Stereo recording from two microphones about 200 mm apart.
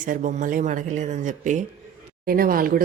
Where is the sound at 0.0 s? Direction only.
40° right (ahead or behind).